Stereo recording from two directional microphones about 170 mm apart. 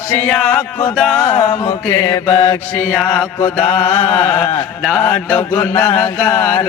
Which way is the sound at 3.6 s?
35° left (ahead or behind).